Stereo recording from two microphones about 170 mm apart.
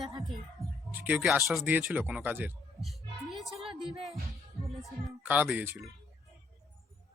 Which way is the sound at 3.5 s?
30° right (ahead or behind).